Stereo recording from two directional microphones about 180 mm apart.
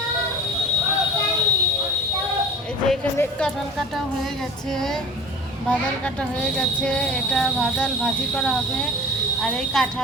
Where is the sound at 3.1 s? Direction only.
10° left (ahead or behind).